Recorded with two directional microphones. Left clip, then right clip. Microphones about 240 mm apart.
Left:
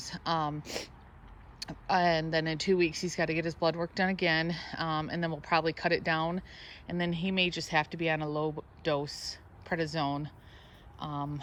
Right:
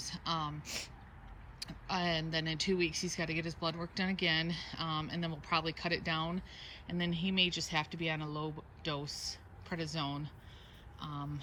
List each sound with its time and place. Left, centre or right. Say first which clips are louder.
0.0 s speech: left 6 dB; centre